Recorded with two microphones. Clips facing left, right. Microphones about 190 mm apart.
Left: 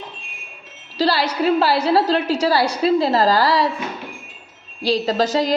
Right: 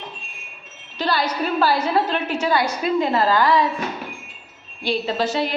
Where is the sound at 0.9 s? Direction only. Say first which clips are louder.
Left 3 dB; 30° left (ahead or behind).